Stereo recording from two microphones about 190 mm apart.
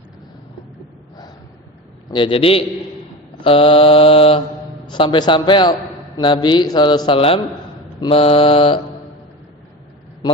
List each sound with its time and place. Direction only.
2.0 s a man's voice: 25° left (ahead or behind)